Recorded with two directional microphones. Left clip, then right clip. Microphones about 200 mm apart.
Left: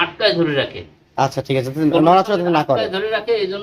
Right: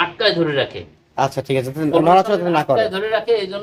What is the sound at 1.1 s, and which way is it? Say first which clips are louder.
Speech: even; 5° left (ahead or behind).